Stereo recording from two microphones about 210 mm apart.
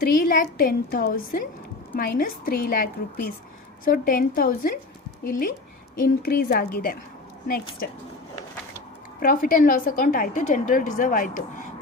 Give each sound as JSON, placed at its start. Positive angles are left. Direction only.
{"t": 0.0, "sound": "a woman's voice", "side_deg": 45}
{"t": 6.0, "sound": "a woman's voice", "side_deg": 45}
{"t": 9.2, "sound": "a woman's voice", "side_deg": 40}